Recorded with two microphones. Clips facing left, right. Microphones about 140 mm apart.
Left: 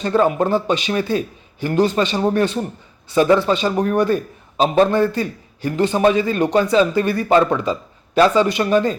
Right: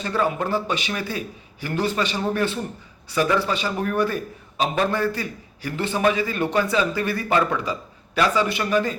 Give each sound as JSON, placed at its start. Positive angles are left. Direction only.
{"t": 0.1, "sound": "a man's voice", "side_deg": 25}